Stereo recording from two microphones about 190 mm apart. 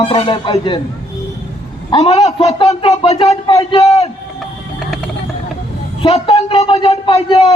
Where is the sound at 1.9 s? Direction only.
30° left (ahead or behind).